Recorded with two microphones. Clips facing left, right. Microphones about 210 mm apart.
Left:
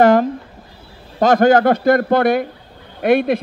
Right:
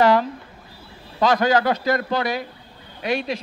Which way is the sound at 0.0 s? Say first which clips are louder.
Left 5 dB; 50° left (ahead or behind).